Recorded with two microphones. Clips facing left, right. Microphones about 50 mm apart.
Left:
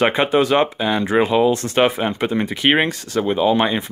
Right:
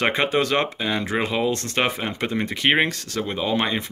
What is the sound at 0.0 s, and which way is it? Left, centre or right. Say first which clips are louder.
Speech: left 5 dB; centre.